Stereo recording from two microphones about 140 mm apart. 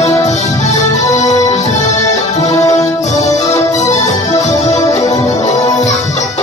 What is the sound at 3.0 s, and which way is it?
Music, 55° left (ahead or behind).